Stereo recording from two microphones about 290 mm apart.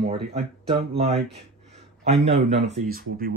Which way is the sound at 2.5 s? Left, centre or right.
Right.